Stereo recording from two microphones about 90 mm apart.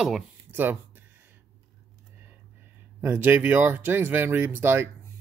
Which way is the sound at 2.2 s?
25° right (ahead or behind).